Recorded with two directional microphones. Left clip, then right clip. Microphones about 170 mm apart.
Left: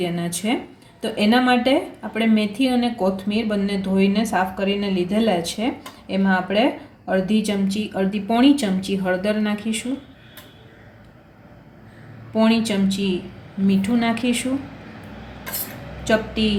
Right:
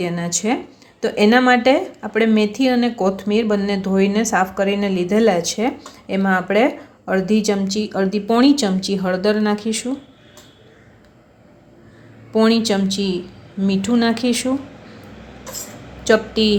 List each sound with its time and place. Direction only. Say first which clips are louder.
0.0 s speech: right 3 dB; 30° right (ahead or behind)
12.3 s speech: right 4 dB; 45° right (ahead or behind)
16.0 s speech: right 5 dB; 45° right (ahead or behind)